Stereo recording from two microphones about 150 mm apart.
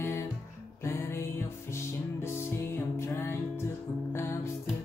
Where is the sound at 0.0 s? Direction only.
15° left (ahead or behind).